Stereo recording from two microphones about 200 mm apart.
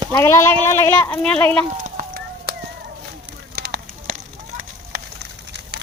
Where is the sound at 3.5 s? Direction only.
55° right (ahead or behind).